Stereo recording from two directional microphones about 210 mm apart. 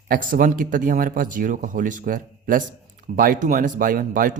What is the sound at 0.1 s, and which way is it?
Speech, 40° right (ahead or behind).